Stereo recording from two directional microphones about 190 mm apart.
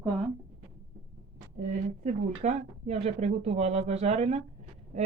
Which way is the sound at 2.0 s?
35° right (ahead or behind).